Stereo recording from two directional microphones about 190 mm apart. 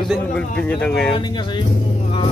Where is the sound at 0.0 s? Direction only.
5° left (ahead or behind).